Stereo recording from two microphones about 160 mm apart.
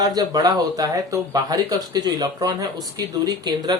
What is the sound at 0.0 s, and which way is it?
Speech, 25° right (ahead or behind).